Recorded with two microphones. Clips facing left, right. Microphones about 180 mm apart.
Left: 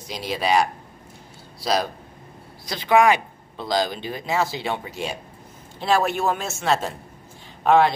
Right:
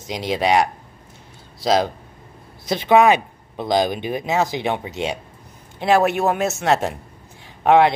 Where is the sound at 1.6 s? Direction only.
20° right (ahead or behind).